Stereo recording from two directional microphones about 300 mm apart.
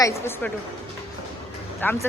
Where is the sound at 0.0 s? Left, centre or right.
Centre.